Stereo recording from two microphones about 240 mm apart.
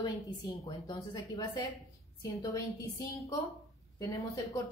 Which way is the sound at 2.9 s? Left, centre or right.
Centre.